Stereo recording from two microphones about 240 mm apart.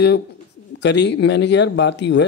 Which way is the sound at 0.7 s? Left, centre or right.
Left.